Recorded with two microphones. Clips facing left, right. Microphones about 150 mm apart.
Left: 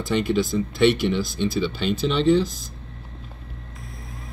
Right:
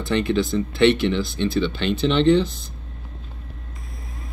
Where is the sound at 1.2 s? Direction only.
60° right (ahead or behind).